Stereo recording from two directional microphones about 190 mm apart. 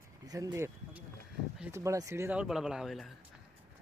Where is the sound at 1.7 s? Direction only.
15° right (ahead or behind); by 3.1 s centre (ahead or behind).